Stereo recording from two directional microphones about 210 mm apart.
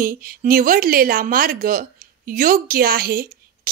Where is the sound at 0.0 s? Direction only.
45° right (ahead or behind).